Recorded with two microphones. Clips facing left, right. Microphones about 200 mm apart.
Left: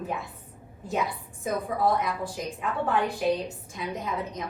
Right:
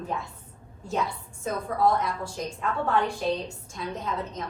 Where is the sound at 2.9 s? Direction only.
15° left (ahead or behind).